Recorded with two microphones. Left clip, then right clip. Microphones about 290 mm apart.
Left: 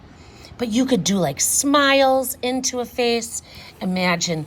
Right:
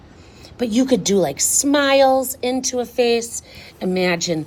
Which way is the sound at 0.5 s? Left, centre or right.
Centre.